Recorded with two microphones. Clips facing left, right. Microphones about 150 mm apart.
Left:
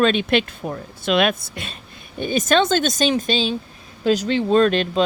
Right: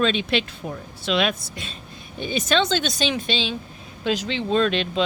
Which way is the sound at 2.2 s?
45° left (ahead or behind).